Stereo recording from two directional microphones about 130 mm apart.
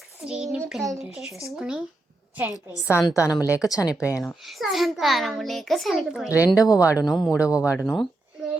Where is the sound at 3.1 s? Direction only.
25° left (ahead or behind).